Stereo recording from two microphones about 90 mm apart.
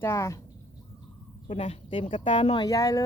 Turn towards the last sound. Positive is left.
turn(degrees=40)  # may be behind; listen again after turning